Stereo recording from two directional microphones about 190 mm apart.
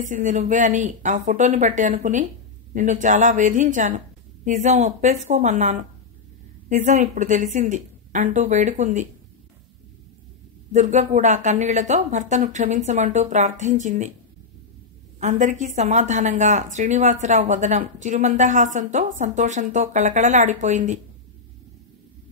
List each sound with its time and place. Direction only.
0.0 s speech: 40° right (ahead or behind)
10.7 s speech: 40° right (ahead or behind)
15.1 s speech: 40° right (ahead or behind)